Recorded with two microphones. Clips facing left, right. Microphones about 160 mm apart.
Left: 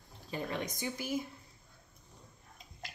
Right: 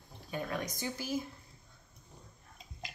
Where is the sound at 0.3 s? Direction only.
25° left (ahead or behind).